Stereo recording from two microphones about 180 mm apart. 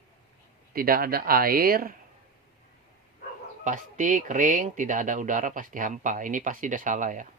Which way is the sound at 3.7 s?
45° right (ahead or behind).